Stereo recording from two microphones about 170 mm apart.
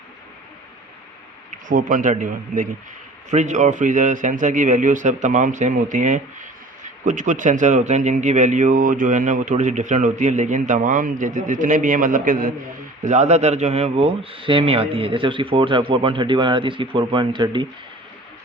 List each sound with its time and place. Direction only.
1.5 s speech: 50° right (ahead or behind)
13.1 s a man's voice: 40° right (ahead or behind)